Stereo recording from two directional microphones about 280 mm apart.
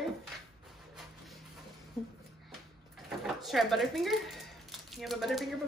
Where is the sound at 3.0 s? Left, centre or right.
Centre.